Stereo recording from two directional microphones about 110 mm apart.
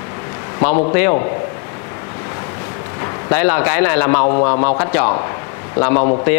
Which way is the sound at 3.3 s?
20° left (ahead or behind).